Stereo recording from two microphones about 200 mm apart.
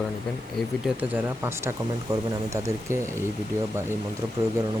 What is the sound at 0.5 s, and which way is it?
Speech, 10° right (ahead or behind).